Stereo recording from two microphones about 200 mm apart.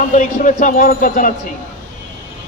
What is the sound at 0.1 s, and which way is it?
Speech, 40° left (ahead or behind).